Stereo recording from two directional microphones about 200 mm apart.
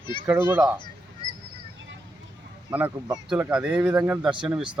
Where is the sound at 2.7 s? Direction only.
10° right (ahead or behind).